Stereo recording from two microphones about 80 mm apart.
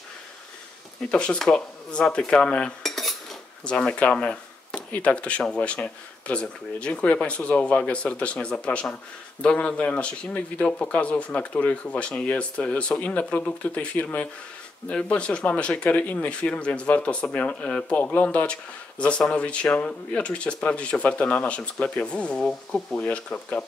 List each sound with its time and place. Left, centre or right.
1.0 s speech: centre
3.6 s speech: centre